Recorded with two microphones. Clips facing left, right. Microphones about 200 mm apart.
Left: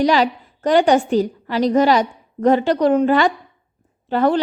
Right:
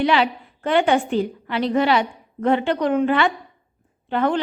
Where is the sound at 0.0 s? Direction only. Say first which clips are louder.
Left 3 dB; 40° left (ahead or behind).